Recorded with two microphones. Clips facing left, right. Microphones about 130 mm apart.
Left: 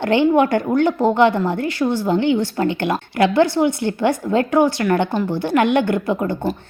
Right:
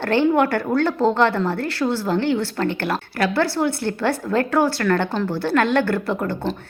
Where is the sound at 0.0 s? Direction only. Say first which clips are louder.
Left 2 dB; 15° left (ahead or behind).